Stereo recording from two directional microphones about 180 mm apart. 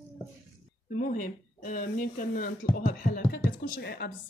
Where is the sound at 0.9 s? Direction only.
50° left (ahead or behind).